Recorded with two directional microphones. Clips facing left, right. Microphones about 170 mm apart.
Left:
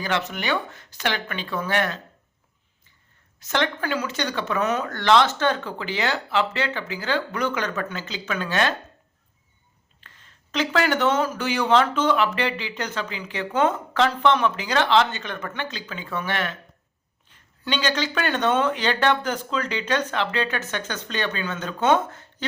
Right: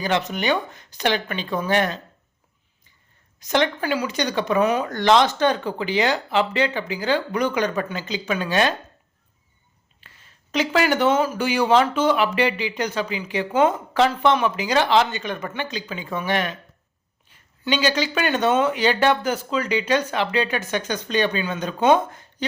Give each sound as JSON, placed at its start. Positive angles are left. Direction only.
{"t": 0.0, "sound": "speech", "side_deg": -20}
{"t": 3.4, "sound": "speech", "side_deg": -15}
{"t": 10.0, "sound": "speech", "side_deg": -10}